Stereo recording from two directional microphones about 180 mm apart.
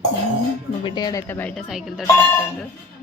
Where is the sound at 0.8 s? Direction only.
25° left (ahead or behind).